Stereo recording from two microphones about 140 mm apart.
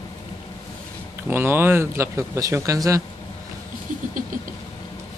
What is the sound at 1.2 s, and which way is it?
Speech, 15° right (ahead or behind).